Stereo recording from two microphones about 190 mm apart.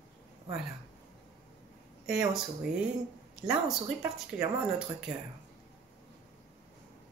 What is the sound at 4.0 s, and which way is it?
Speech, 10° right (ahead or behind).